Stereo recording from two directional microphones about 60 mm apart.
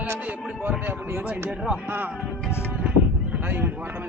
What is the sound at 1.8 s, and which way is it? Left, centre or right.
Speech, right.